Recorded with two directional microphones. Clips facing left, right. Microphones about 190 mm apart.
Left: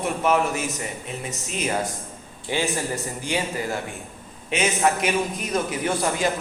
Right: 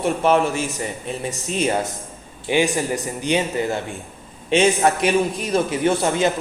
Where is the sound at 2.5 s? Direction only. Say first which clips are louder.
Right 6 dB; 15° right (ahead or behind).